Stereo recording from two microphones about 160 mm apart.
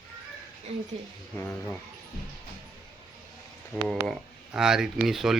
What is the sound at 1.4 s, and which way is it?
Speech, 10° left (ahead or behind).